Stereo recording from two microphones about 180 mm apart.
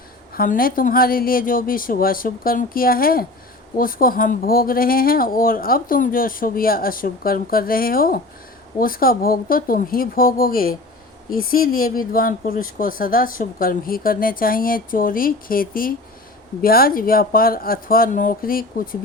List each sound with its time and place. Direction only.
0.3 s speech: 55° left (ahead or behind)